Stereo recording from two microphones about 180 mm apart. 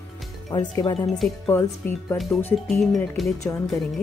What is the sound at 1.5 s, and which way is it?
Speech, 10° left (ahead or behind).